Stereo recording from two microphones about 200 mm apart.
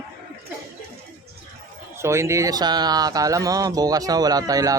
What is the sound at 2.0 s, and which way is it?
Speech, 15° right (ahead or behind).